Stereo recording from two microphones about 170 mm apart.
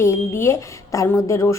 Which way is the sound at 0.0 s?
15° left (ahead or behind).